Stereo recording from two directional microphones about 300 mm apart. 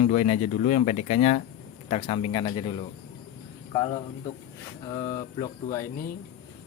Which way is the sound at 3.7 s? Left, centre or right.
Centre.